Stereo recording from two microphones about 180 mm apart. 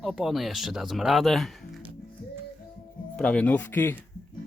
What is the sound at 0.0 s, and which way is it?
Speech, centre (ahead or behind).